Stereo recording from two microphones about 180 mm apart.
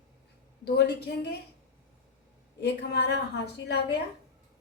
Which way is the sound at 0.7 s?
70° left (ahead or behind).